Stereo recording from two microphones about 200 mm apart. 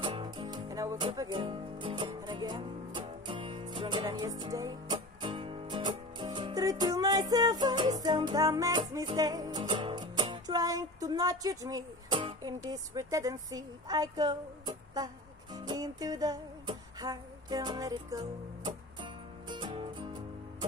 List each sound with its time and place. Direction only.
0.0 s music: 25° right (ahead or behind)
15.5 s music: 20° right (ahead or behind)